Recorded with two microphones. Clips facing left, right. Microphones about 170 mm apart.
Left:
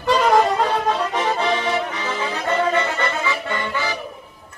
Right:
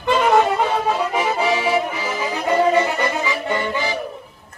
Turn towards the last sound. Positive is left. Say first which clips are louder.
# right 3 dB
turn(degrees=-15)  # may be behind; listen again after turning